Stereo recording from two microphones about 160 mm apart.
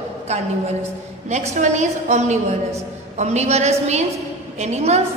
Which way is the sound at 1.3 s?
45° right (ahead or behind).